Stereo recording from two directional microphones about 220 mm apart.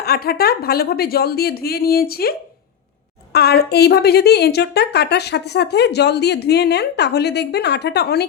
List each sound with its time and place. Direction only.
0.0 s a woman's voice: 45° left (ahead or behind)
3.3 s a woman's voice: 45° left (ahead or behind)